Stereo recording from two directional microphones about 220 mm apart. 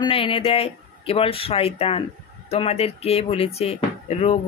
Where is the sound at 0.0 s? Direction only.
25° left (ahead or behind).